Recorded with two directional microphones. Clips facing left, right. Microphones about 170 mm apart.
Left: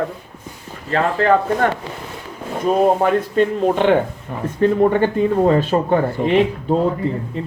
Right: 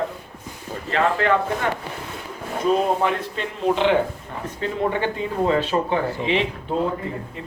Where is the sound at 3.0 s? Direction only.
50° left (ahead or behind).